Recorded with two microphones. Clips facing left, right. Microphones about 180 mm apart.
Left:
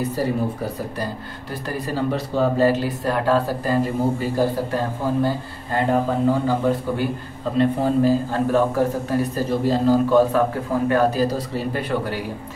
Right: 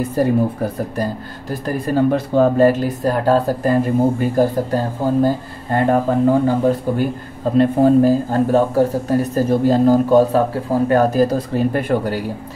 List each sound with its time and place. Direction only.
0.1 s a man's voice: 50° right (ahead or behind)
7.5 s a man's voice: 45° right (ahead or behind)